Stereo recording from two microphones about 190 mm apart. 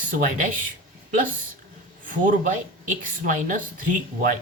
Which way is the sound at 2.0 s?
45° right (ahead or behind).